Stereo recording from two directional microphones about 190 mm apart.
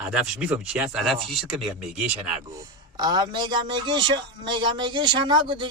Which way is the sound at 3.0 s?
20° right (ahead or behind).